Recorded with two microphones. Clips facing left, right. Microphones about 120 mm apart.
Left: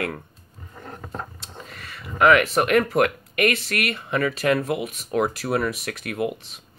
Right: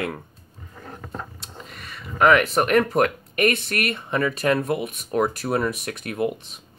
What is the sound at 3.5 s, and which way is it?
Speech, 50° right (ahead or behind).